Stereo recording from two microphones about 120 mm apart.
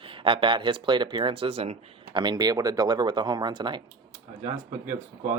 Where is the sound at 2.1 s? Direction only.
35° right (ahead or behind).